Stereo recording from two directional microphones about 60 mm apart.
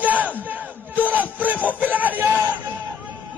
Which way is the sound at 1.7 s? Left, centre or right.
Right.